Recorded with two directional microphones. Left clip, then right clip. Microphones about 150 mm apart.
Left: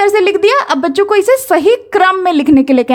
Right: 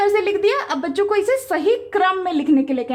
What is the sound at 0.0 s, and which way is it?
A woman's voice, 55° left (ahead or behind).